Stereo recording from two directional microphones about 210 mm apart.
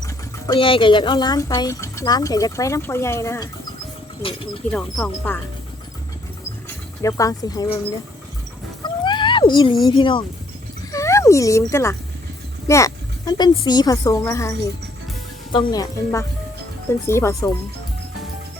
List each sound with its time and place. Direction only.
0.0 s speech: 15° left (ahead or behind)
4.7 s speech: 5° left (ahead or behind)
7.0 s speech: 15° left (ahead or behind)
8.8 s a sound: 20° left (ahead or behind)
9.8 s a woman's voice: 25° left (ahead or behind)
15.7 s speech: 15° left (ahead or behind)